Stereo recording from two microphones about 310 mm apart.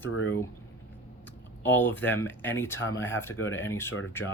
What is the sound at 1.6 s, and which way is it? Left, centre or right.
Speech, centre.